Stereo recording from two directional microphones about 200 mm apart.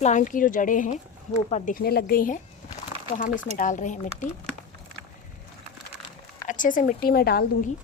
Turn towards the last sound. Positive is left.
turn(degrees=50)  # may be behind; listen again after turning